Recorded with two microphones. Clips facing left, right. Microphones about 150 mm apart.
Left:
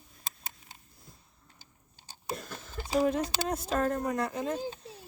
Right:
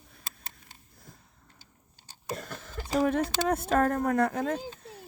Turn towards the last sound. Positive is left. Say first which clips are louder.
# right 5 dB
turn(degrees=-55)  # may be behind; listen again after turning